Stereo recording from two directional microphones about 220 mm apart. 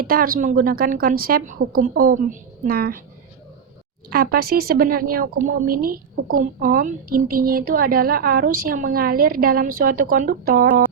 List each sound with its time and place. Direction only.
0.0 s a woman's voice: 40° right (ahead or behind)
4.1 s a woman's voice: 45° right (ahead or behind)